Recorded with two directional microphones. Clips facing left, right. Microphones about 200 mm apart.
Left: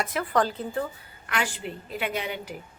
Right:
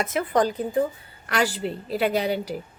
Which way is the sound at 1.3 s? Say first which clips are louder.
Right 6 dB; 40° right (ahead or behind).